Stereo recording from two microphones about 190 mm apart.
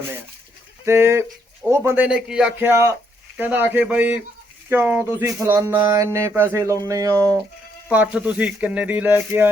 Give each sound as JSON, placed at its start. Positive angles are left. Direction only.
{"t": 0.9, "sound": "speech", "side_deg": -15}